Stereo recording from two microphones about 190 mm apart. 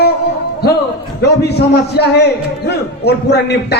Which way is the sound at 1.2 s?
60° left (ahead or behind).